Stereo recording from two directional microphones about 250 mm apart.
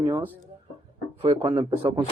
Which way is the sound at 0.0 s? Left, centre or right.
Centre.